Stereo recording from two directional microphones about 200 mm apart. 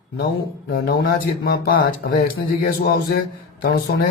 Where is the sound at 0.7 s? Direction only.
50° left (ahead or behind).